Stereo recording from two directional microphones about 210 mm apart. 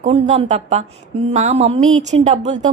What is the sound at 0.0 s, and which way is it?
A woman's voice, 30° right (ahead or behind).